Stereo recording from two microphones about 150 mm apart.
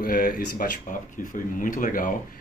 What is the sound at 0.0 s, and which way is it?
Speech, 70° left (ahead or behind).